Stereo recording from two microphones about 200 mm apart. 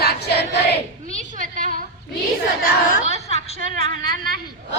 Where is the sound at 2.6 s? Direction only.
45° left (ahead or behind).